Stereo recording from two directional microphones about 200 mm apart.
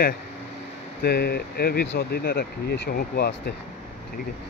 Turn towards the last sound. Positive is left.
turn(degrees=50)  # may be behind; listen again after turning